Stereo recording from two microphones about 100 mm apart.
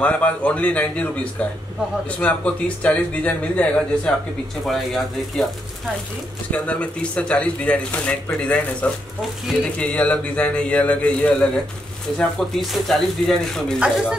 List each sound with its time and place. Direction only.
0.0 s speech: 15° left (ahead or behind)
4.6 s speech: centre (ahead or behind)
6.5 s speech: 15° left (ahead or behind)
12.2 s speech: centre (ahead or behind)
13.7 s speech: 10° right (ahead or behind)